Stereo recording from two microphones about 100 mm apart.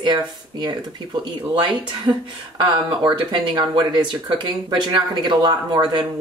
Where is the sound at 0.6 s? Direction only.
45° right (ahead or behind).